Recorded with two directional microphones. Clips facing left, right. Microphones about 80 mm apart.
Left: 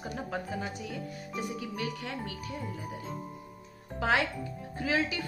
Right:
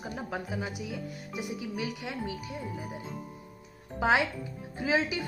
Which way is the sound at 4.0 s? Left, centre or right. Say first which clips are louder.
Right 2 dB; centre.